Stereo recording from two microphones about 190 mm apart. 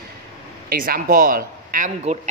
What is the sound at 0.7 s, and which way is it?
A woman's voice, 50° right (ahead or behind).